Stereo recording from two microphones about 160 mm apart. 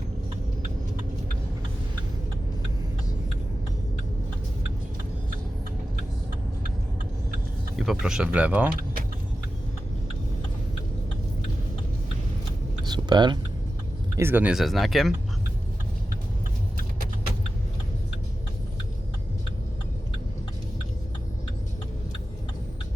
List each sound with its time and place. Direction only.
7.8 s speech: centre (ahead or behind)
12.8 s a sound: 25° right (ahead or behind)
14.2 s speech: 15° right (ahead or behind)